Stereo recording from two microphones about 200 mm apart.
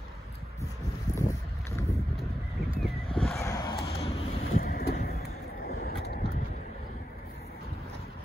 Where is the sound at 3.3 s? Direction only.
15° left (ahead or behind).